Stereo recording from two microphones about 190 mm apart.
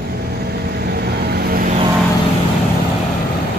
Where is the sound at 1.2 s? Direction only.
55° right (ahead or behind).